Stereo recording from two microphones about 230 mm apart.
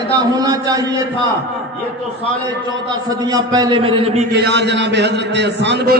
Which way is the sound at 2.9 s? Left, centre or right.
Centre.